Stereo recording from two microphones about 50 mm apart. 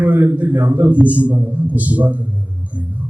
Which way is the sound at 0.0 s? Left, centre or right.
Right.